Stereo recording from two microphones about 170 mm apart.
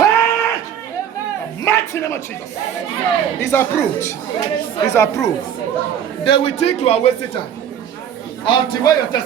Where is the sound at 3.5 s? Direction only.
15° left (ahead or behind).